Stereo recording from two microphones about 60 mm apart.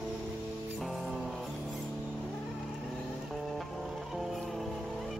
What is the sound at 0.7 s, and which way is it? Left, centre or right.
Music, centre.